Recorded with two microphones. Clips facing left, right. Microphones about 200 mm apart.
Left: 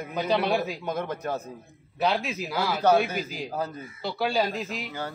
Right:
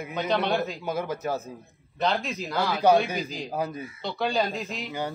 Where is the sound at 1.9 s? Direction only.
5° left (ahead or behind).